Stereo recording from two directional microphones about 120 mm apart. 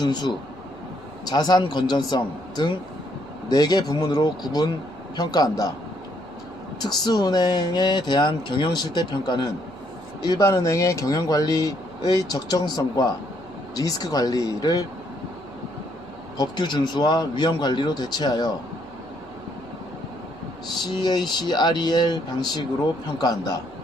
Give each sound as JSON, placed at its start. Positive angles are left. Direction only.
{"t": 0.0, "sound": "speech", "side_deg": 35}
{"t": 6.8, "sound": "speech", "side_deg": 35}
{"t": 16.4, "sound": "speech", "side_deg": 40}
{"t": 20.8, "sound": "speech", "side_deg": 35}